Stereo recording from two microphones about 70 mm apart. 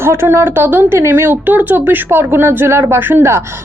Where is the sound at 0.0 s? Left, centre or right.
Right.